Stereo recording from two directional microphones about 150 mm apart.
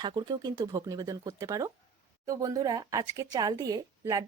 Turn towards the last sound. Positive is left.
turn(degrees=-20)  # may be behind; listen again after turning